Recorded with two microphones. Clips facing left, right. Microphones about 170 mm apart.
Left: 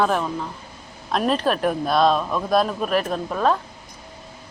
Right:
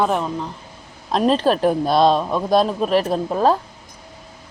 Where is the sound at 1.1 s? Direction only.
30° right (ahead or behind).